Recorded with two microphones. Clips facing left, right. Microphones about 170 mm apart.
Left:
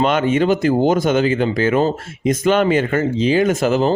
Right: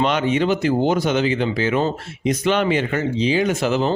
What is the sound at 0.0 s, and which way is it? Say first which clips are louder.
Speech: left 3 dB; 50° left (ahead or behind).